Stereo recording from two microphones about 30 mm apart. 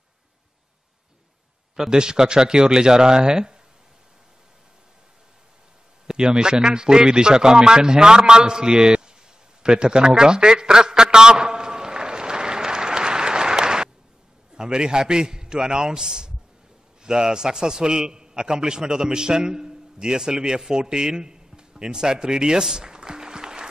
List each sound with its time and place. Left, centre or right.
1.9 s a man's voice: right
6.0 s a man's voice: right
9.6 s a sound: right
14.5 s a man's voice: right
22.8 s music: right